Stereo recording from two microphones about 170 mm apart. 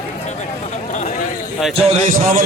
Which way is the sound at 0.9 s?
45° left (ahead or behind).